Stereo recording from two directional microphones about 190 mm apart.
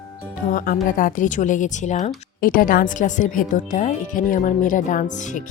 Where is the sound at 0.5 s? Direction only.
45° left (ahead or behind).